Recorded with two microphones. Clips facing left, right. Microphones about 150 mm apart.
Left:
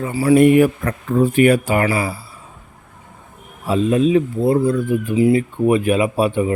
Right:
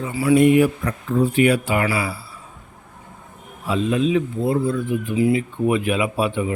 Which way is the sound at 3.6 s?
40° left (ahead or behind).